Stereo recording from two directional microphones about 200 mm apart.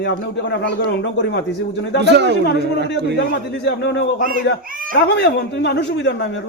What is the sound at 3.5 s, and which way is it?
Speech, 60° left (ahead or behind).